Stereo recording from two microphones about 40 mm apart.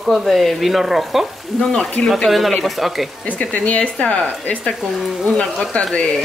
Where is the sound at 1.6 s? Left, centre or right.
Centre.